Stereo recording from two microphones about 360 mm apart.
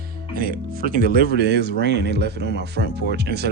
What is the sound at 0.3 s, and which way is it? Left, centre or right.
Speech, right.